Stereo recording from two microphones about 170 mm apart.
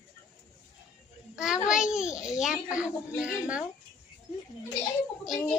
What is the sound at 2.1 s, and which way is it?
Speech, 20° left (ahead or behind).